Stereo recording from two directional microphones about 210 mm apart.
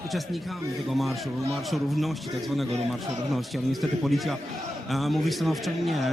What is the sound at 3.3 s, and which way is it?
A man's voice, centre (ahead or behind).